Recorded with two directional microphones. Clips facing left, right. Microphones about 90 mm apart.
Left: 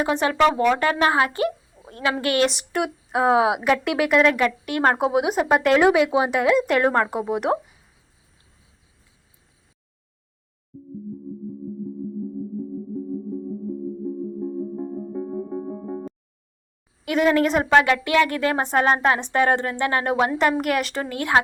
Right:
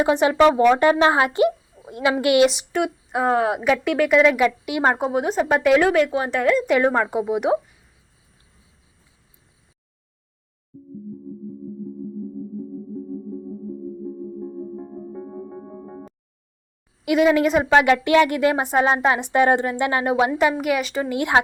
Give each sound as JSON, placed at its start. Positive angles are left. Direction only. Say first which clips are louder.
{"t": 0.0, "sound": "a woman's voice", "louder": "right 3 dB", "side_deg": -20}
{"t": 2.5, "sound": "speech", "louder": "right 2 dB", "side_deg": 0}
{"t": 4.9, "sound": "speech", "louder": "left 1 dB", "side_deg": 5}
{"t": 5.8, "sound": "speech", "louder": "left 1 dB", "side_deg": 15}
{"t": 14.4, "sound": "music", "louder": "left 4 dB", "side_deg": 0}
{"t": 17.1, "sound": "speech", "louder": "right 2 dB", "side_deg": -10}
{"t": 17.8, "sound": "a woman's voice", "louder": "right 3 dB", "side_deg": -25}
{"t": 21.1, "sound": "a woman's voice", "louder": "right 1 dB", "side_deg": -20}